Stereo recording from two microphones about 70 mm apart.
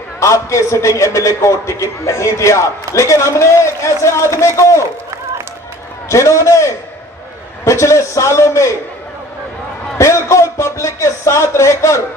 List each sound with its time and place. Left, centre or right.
0.2 s a man's voice: left
6.0 s a man's voice: left
9.9 s a man's voice: left